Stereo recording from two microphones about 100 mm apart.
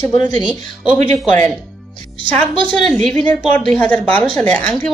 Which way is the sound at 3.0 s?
10° left (ahead or behind).